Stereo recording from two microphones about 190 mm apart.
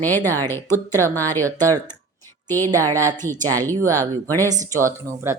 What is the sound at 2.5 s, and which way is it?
Speech, 10° left (ahead or behind).